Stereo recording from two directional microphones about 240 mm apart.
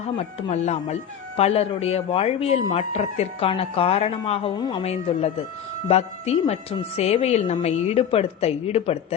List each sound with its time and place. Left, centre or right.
0.2 s speech: left